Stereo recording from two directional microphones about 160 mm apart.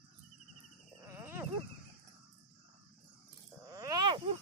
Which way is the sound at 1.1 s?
15° right (ahead or behind).